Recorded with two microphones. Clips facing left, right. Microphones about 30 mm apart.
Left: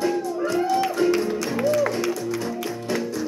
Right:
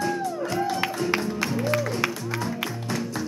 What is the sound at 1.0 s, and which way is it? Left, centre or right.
Music, left.